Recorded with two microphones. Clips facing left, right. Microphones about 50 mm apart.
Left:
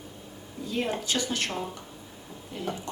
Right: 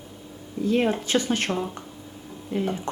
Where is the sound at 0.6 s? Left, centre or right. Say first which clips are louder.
Right 9 dB; right.